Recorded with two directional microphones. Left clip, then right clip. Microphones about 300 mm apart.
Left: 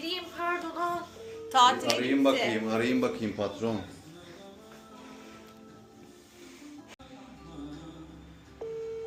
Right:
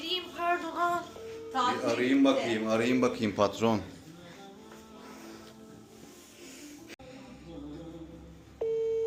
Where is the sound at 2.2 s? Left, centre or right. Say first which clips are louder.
Left 1 dB; centre.